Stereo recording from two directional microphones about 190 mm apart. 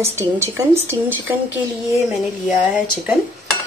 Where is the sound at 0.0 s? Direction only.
15° right (ahead or behind).